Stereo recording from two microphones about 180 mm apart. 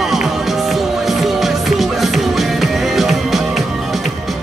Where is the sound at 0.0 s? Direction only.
Centre (ahead or behind).